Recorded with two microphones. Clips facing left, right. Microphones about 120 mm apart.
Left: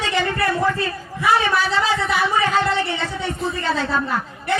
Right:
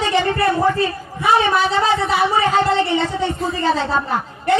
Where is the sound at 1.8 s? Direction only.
30° right (ahead or behind).